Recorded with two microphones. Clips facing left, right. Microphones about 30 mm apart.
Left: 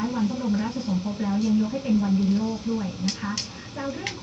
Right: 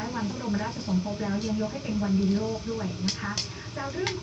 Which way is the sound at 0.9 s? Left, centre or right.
Centre.